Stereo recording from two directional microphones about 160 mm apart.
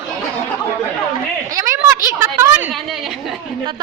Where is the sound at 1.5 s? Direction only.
20° right (ahead or behind).